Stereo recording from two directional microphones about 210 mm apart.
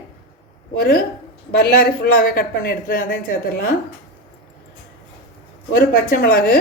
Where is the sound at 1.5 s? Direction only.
45° left (ahead or behind).